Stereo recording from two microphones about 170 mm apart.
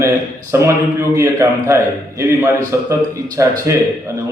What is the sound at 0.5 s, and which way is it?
A man's voice, 15° right (ahead or behind).